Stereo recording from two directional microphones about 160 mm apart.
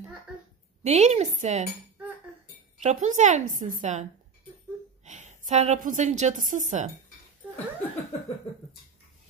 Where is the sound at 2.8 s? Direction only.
45° right (ahead or behind).